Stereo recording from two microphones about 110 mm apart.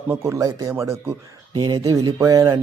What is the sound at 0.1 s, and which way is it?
Speech, 25° right (ahead or behind).